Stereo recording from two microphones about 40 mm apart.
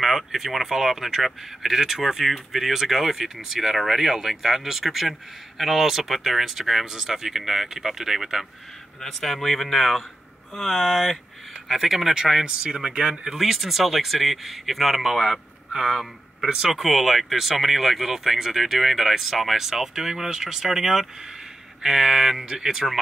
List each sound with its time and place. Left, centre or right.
0.0 s speech: centre
9.0 s speech: centre
11.7 s speech: centre
13.4 s speech: centre
16.7 s speech: centre